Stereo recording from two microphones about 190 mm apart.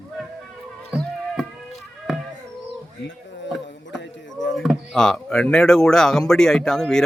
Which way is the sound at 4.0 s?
70° left (ahead or behind).